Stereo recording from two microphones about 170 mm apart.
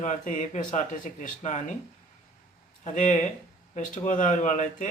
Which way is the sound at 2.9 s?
45° left (ahead or behind).